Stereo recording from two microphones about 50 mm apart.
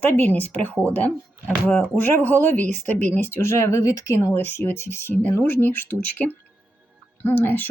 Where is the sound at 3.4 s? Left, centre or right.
Left.